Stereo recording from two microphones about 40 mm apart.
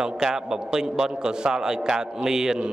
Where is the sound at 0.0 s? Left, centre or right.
Centre.